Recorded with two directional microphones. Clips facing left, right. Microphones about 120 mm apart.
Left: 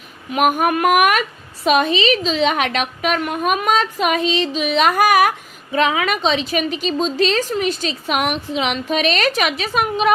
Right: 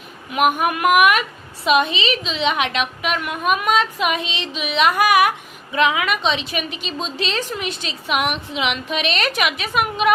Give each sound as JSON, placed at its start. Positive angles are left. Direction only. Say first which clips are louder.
{"t": 0.3, "sound": "a woman's voice", "louder": "left 2 dB", "side_deg": 40}